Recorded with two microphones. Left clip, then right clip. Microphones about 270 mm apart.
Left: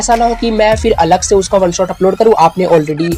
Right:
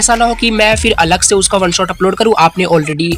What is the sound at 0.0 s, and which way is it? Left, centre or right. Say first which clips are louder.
Speech: even; right.